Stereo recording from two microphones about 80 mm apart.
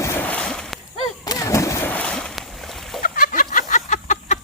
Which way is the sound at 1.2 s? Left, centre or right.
Left.